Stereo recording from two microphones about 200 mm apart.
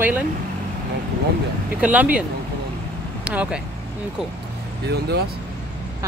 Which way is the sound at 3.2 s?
5° right (ahead or behind).